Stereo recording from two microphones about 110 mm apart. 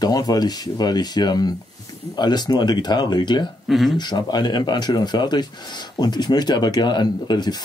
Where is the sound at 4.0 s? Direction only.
40° left (ahead or behind).